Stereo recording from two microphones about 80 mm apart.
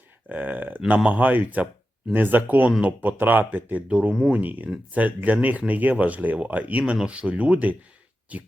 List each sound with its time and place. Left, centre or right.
0.3 s speech: centre